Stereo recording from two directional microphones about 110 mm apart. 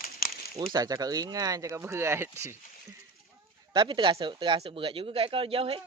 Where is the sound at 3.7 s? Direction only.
45° right (ahead or behind).